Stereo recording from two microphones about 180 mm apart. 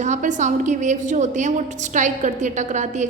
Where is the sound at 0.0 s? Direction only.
45° right (ahead or behind).